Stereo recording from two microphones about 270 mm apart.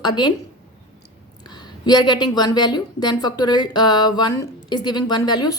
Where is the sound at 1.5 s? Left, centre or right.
Centre.